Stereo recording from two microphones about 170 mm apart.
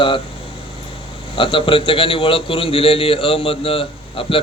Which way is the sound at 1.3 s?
30° left (ahead or behind).